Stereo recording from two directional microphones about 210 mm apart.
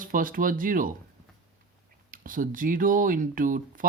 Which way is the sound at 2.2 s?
40° right (ahead or behind).